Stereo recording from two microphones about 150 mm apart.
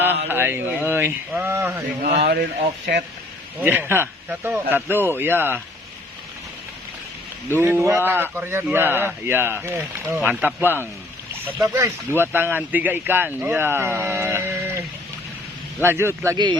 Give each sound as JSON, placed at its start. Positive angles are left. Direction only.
{"t": 0.0, "sound": "speech", "side_deg": -15}
{"t": 2.2, "sound": "speech", "side_deg": -90}
{"t": 3.6, "sound": "speech", "side_deg": -15}
{"t": 7.5, "sound": "speech", "side_deg": -15}